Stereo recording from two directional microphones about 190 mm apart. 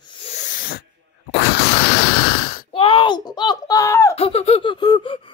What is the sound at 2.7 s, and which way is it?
A woman's voice, 25° left (ahead or behind).